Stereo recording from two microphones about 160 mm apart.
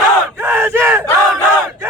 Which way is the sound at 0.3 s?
10° right (ahead or behind).